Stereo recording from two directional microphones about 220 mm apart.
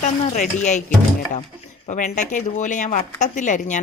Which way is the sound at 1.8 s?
35° left (ahead or behind).